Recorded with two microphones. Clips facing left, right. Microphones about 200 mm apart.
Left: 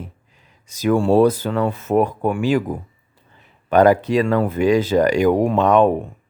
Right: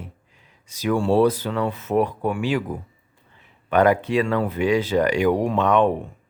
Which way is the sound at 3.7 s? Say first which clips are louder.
Left 4 dB; 35° left (ahead or behind).